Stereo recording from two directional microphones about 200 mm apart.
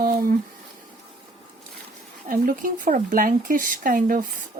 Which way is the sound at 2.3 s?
45° right (ahead or behind).